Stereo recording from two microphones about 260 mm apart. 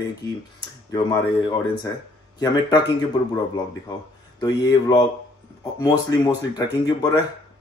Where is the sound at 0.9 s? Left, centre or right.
Centre.